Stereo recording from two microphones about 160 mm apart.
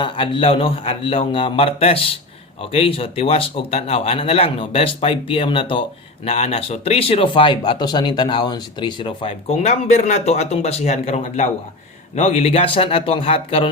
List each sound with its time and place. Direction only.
0.0 s speech: 35° left (ahead or behind)